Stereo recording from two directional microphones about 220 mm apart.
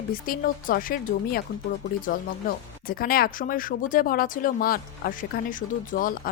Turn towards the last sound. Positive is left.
turn(degrees=40)  # may be behind; listen again after turning